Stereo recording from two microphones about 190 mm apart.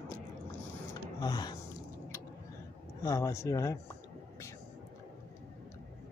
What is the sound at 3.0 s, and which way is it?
Speech, 15° left (ahead or behind).